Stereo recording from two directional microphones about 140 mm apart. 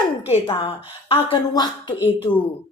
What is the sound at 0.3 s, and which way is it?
A woman's voice, 40° left (ahead or behind).